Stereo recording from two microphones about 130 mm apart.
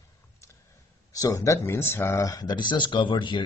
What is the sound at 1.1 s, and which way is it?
Speech, 25° left (ahead or behind).